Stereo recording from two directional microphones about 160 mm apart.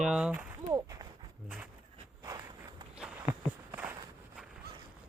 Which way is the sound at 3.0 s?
5° right (ahead or behind).